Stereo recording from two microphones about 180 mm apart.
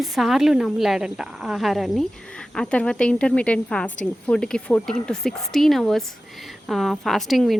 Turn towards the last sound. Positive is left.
turn(degrees=0)  # may be behind; listen again after turning